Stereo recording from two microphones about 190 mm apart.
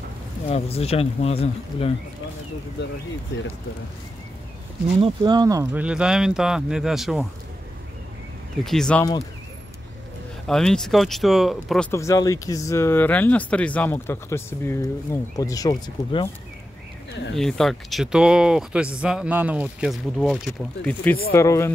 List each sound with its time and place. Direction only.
0.5 s speech: 30° left (ahead or behind)
5.0 s speech: 20° right (ahead or behind); by 7.2 s centre (ahead or behind)
8.6 s speech: 5° left (ahead or behind)
10.4 s speech: 5° left (ahead or behind)
11.9 s speech: 15° left (ahead or behind)
17.1 s speech: 65° left (ahead or behind)
17.4 s speech: centre (ahead or behind)